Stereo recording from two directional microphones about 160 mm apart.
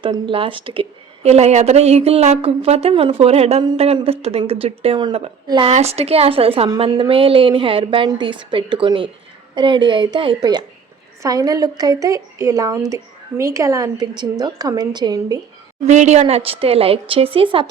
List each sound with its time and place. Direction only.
0.0 s a woman's voice: 35° right (ahead or behind)
15.9 s a woman's voice: 45° right (ahead or behind)